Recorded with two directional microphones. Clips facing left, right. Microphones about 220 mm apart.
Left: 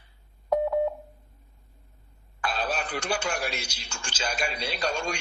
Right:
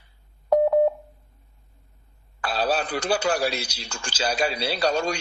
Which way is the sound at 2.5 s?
35° right (ahead or behind).